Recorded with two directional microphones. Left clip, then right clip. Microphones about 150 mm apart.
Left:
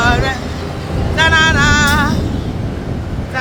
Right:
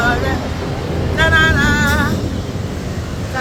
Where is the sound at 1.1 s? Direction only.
25° left (ahead or behind).